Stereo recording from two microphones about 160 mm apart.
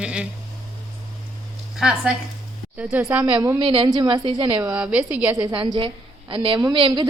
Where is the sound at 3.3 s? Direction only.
20° right (ahead or behind).